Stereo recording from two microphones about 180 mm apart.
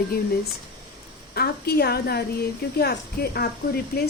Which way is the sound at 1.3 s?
60° left (ahead or behind).